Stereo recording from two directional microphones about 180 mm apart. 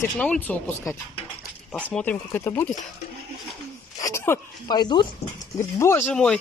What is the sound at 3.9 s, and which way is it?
Speech, 15° left (ahead or behind).